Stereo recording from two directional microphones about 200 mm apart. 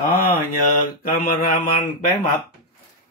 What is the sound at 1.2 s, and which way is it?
Speech, 45° left (ahead or behind).